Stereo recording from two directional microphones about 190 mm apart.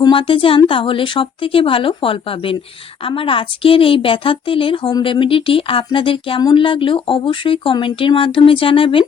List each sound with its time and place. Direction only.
0.0 s speech: 25° left (ahead or behind)